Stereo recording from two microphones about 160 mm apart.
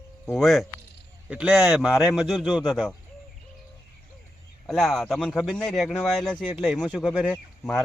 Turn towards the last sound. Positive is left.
turn(degrees=0)  # may be behind; listen again after turning